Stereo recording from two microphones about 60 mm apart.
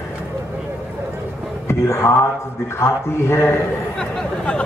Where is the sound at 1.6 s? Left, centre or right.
Left.